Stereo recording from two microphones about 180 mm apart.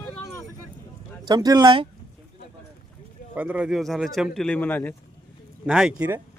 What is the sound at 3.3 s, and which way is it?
Speech, 10° right (ahead or behind).